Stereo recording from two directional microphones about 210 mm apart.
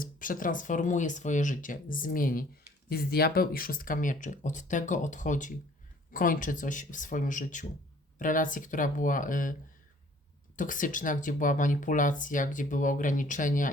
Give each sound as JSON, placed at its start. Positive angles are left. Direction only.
{"t": 0.0, "sound": "speech", "side_deg": 40}
{"t": 10.6, "sound": "speech", "side_deg": 40}